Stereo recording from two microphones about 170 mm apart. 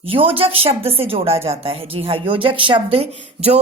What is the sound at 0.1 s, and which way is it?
Speech, 30° right (ahead or behind).